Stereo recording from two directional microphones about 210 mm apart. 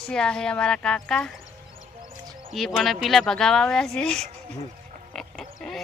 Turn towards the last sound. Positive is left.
turn(degrees=0)  # may be behind; listen again after turning